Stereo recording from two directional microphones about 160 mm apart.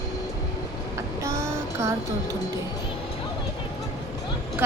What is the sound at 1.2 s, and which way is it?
Child singing, 20° right (ahead or behind).